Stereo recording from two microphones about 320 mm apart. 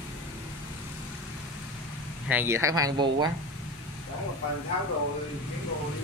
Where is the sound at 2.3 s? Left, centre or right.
Centre.